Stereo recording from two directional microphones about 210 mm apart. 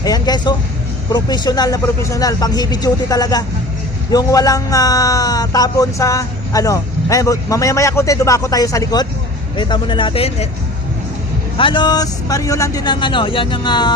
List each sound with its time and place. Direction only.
0.0 s a man's voice: 20° left (ahead or behind)
11.5 s a man's voice: 25° left (ahead or behind)